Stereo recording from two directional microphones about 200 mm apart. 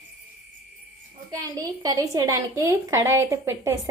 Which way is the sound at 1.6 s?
20° right (ahead or behind).